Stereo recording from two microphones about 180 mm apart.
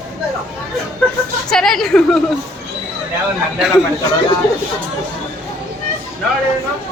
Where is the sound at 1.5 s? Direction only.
5° left (ahead or behind).